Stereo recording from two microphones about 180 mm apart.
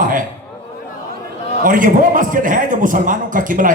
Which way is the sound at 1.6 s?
50° right (ahead or behind).